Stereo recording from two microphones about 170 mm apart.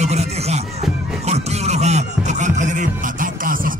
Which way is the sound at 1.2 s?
40° right (ahead or behind).